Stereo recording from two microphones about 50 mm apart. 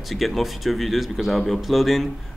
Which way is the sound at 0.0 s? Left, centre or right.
Centre.